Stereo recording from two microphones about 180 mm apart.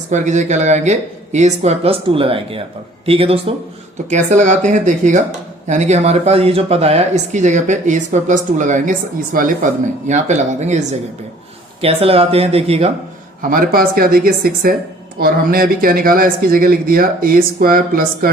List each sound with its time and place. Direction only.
0.1 s speech: 40° right (ahead or behind)
13.5 s speech: 55° right (ahead or behind)